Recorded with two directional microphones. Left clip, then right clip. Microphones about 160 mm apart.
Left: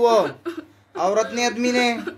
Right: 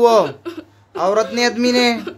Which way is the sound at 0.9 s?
25° right (ahead or behind).